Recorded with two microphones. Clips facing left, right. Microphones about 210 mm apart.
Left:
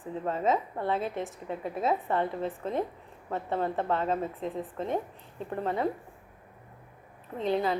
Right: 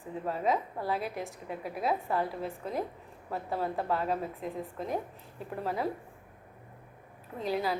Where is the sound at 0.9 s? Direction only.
25° left (ahead or behind).